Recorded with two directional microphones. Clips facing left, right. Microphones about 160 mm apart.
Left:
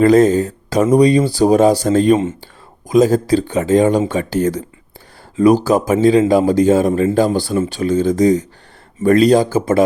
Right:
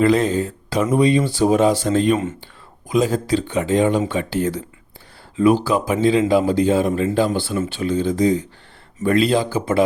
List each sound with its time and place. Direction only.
0.0 s speech: 40° left (ahead or behind)